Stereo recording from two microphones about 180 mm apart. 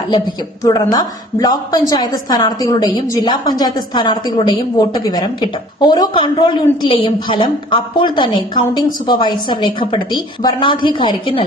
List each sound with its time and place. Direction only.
0.6 s a woman's voice: 20° left (ahead or behind)